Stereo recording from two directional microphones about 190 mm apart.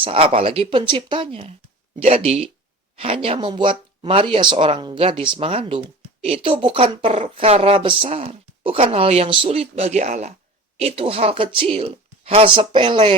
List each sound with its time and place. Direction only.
0.0 s speech: 30° right (ahead or behind)